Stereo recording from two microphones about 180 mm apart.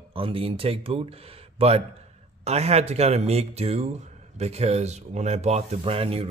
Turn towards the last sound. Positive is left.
turn(degrees=-35)  # may be behind; listen again after turning